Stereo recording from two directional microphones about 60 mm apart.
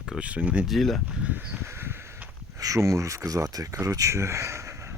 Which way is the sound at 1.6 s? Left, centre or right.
Right.